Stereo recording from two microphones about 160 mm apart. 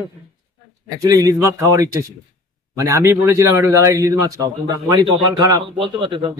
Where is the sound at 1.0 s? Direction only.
20° right (ahead or behind).